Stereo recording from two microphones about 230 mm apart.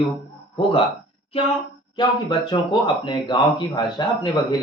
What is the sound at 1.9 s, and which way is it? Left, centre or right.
A man's voice, centre.